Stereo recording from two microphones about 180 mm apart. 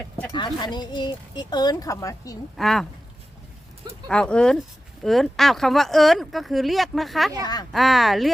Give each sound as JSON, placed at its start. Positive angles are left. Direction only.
{"t": 0.0, "sound": "speech", "side_deg": 10}
{"t": 0.3, "sound": "speech", "side_deg": 25}
{"t": 2.6, "sound": "speech", "side_deg": 0}
{"t": 4.1, "sound": "speech", "side_deg": 5}
{"t": 7.4, "sound": "speech", "side_deg": 20}
{"t": 7.7, "sound": "speech", "side_deg": 0}